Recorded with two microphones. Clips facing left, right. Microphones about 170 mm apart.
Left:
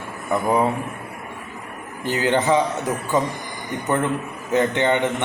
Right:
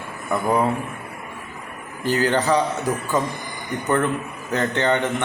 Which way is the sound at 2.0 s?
20° left (ahead or behind).